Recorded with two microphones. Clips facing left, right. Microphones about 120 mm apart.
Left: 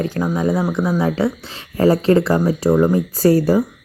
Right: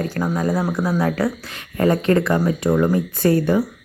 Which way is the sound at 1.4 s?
30° left (ahead or behind).